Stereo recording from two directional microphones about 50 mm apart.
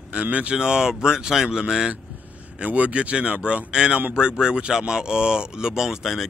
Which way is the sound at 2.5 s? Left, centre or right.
Right.